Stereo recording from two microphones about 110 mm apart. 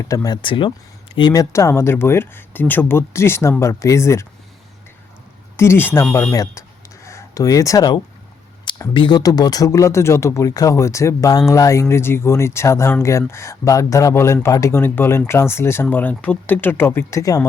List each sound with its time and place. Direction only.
0.0 s speech: 30° left (ahead or behind)
0.4 s speech: 50° left (ahead or behind)
1.3 s speech: 30° left (ahead or behind)
5.5 s speech: 20° left (ahead or behind)
6.3 s a sound: 30° left (ahead or behind)
8.9 s speech: 45° left (ahead or behind)